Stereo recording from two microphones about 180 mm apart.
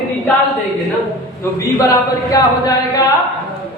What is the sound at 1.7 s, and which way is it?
Speech, 20° left (ahead or behind).